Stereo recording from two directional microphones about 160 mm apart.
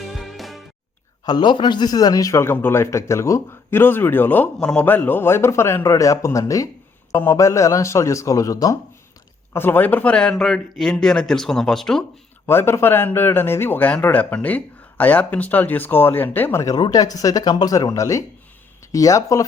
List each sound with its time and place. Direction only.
0.0 s music: centre (ahead or behind)
1.2 s speech: 25° left (ahead or behind); by 12.0 s centre (ahead or behind)
12.5 s speech: 15° left (ahead or behind)